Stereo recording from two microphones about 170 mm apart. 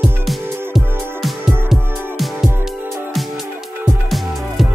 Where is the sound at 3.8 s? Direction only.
Centre (ahead or behind).